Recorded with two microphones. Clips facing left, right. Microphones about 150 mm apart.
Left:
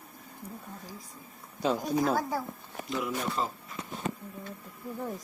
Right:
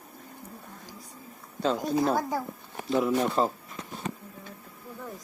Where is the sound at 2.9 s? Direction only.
35° right (ahead or behind).